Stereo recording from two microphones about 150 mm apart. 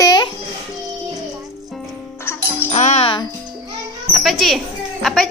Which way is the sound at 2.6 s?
50° left (ahead or behind).